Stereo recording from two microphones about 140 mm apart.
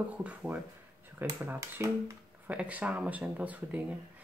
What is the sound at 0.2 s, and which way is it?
Speech, 10° right (ahead or behind).